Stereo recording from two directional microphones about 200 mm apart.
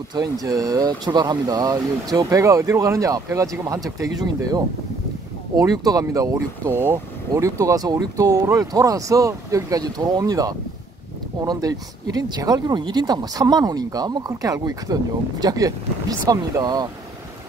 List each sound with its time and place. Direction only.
0.1 s speech: 20° right (ahead or behind)